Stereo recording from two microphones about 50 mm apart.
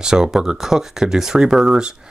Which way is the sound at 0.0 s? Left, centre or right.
Centre.